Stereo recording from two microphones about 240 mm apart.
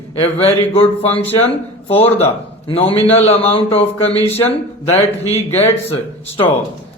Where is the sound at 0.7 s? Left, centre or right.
Left.